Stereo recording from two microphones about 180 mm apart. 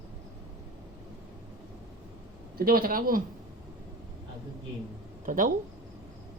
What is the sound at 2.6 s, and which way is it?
Speech, 55° right (ahead or behind).